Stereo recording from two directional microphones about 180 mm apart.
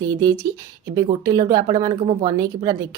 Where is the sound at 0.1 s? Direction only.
20° right (ahead or behind).